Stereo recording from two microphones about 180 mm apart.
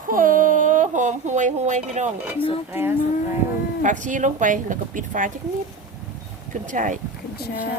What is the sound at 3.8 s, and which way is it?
Speech, 45° right (ahead or behind).